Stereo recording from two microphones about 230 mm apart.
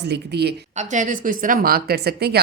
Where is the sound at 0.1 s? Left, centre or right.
Right.